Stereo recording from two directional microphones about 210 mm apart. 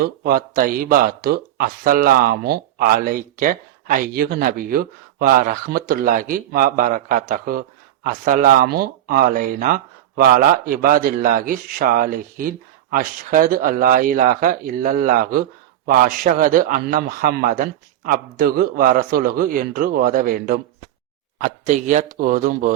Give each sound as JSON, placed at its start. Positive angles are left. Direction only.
{"t": 0.0, "sound": "speech", "side_deg": -45}